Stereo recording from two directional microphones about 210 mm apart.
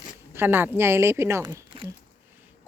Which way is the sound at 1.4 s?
25° right (ahead or behind).